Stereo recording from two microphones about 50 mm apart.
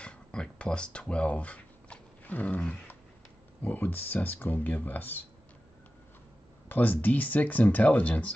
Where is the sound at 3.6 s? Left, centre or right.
Left.